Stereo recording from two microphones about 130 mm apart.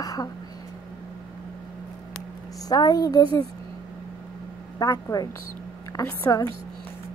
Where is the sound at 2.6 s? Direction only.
30° left (ahead or behind).